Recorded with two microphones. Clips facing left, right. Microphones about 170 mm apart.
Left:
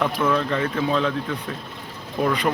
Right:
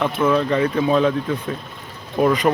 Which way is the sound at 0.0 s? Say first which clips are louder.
Right 3 dB; 10° right (ahead or behind).